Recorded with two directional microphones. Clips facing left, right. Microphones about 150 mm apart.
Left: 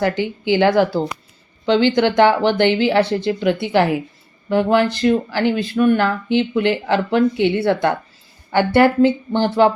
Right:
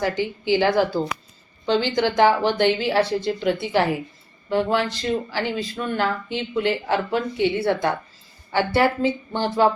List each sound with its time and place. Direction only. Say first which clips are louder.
0.0 s speech: left 4 dB; 65° left (ahead or behind)